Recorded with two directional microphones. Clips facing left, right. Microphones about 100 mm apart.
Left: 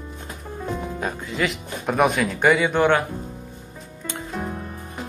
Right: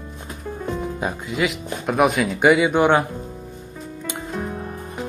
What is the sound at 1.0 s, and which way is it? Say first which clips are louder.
Music: right 2 dB; 15° right (ahead or behind).